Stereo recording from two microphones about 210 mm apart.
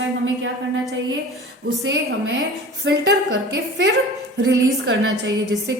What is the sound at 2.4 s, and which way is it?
A woman's voice, 50° right (ahead or behind).